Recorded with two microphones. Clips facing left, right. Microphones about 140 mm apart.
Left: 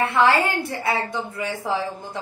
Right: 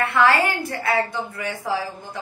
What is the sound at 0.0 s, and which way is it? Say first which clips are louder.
A woman's voice: even; 25° left (ahead or behind).